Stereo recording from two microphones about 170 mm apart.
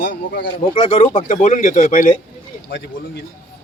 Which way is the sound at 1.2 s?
45° left (ahead or behind).